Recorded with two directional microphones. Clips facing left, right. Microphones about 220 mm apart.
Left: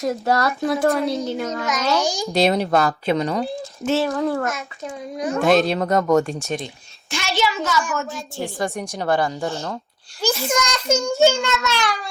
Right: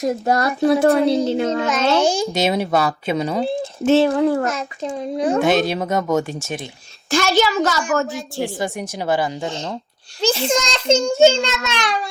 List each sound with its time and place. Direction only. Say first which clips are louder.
0.0 s a child's voice: right 2 dB; 20° right (ahead or behind)
0.6 s a child's voice: right 5 dB; 30° right (ahead or behind)
1.0 s a woman's voice: right 6 dB; 65° right (ahead or behind)
1.4 s a child's voice: right 5 dB; 30° right (ahead or behind)
2.0 s a woman's voice: right 6 dB; 60° right (ahead or behind)
2.3 s speech: left 1 dB; centre (ahead or behind)
3.4 s a child's voice: right 6 dB; 25° right (ahead or behind)
5.4 s speech: left 4 dB; centre (ahead or behind)
7.1 s speech: right 6 dB; 40° right (ahead or behind)
8.6 s speech: even; 5° right (ahead or behind)
9.3 s speech: even; 15° right (ahead or behind)
10.2 s a child's voice: right 3 dB; 30° right (ahead or behind)